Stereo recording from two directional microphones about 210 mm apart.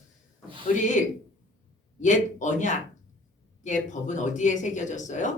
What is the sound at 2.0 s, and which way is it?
Speech, 35° left (ahead or behind).